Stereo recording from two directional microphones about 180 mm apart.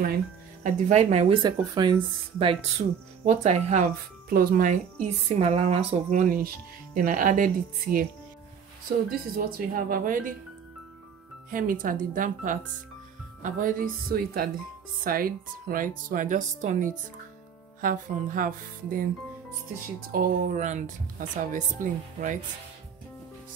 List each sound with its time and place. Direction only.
0.7 s speech: 40° right (ahead or behind)
1.4 s speech: 25° right (ahead or behind)
3.3 s speech: 35° right (ahead or behind)
9.3 s speech: 55° right (ahead or behind)
11.5 s speech: 50° right (ahead or behind)
20.1 s speech: 50° right (ahead or behind)